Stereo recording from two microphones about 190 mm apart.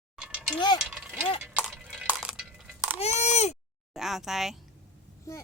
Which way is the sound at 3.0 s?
35° left (ahead or behind).